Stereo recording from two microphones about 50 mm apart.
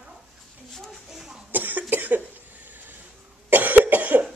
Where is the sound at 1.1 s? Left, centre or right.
Centre.